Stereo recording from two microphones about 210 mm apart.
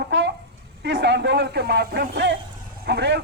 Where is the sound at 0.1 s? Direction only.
55° right (ahead or behind).